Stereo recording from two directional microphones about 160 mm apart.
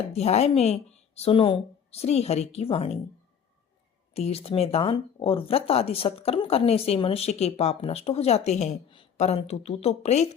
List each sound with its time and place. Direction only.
0.0 s speech: 40° left (ahead or behind)
4.1 s speech: 40° left (ahead or behind)